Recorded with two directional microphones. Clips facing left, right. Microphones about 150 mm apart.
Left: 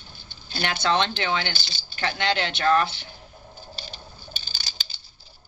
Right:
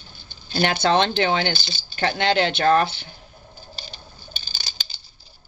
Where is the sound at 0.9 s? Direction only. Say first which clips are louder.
Right 5 dB; 55° right (ahead or behind).